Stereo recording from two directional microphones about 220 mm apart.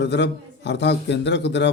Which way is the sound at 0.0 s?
50° left (ahead or behind).